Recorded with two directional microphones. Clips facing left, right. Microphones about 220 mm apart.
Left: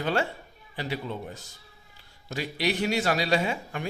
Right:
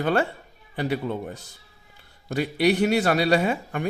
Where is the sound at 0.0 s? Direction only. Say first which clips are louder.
Right 4 dB; 55° right (ahead or behind).